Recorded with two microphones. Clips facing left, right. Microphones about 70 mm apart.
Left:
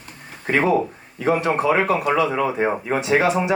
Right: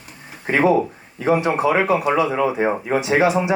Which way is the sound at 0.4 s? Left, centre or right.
Centre.